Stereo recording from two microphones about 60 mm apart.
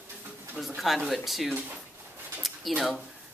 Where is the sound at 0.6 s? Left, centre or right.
Centre.